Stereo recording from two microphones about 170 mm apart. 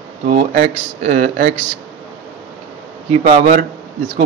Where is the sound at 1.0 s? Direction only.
45° right (ahead or behind).